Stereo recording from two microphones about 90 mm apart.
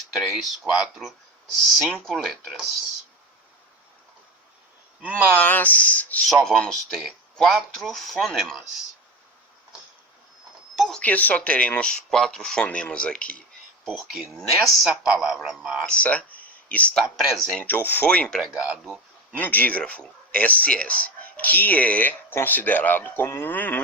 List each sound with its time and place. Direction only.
0.1 s speech: 5° right (ahead or behind)
5.1 s speech: 20° left (ahead or behind)
6.2 s speech: 5° left (ahead or behind)
10.8 s a sound: centre (ahead or behind)
11.0 s speech: 15° left (ahead or behind)
13.8 s speech: centre (ahead or behind)
15.9 s speech: 15° left (ahead or behind)
17.6 s speech: 20° left (ahead or behind)
18.5 s speech: 10° right (ahead or behind)
19.4 s speech: 20° left (ahead or behind)